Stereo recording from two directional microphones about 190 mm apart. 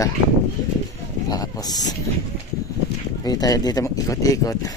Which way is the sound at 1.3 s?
20° left (ahead or behind).